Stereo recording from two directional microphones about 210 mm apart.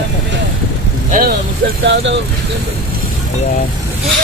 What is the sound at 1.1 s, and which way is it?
Speech, 45° right (ahead or behind).